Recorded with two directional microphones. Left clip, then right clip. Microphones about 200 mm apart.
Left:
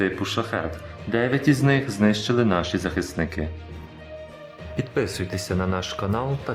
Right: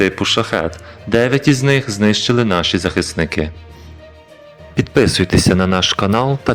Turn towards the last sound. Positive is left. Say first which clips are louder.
# right 11 dB
turn(degrees=-30)  # may be behind; listen again after turning